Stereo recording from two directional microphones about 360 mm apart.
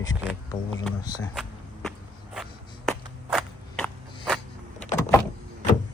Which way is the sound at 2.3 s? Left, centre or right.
Centre.